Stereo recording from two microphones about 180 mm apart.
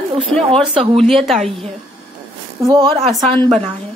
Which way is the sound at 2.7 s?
30° right (ahead or behind).